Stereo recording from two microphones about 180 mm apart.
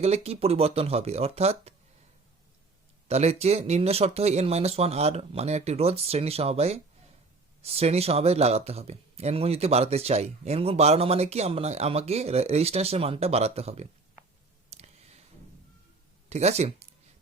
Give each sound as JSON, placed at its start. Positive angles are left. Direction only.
{"t": 0.0, "sound": "speech", "side_deg": -35}
{"t": 3.1, "sound": "speech", "side_deg": -35}
{"t": 14.7, "sound": "clicking", "side_deg": -35}
{"t": 16.3, "sound": "speech", "side_deg": -35}